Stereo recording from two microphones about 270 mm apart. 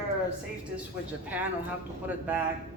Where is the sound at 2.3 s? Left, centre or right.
Centre.